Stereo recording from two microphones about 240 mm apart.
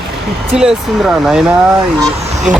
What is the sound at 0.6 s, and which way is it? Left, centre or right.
Speech, centre.